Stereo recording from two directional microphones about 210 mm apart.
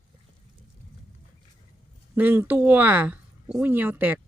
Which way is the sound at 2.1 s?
10° right (ahead or behind).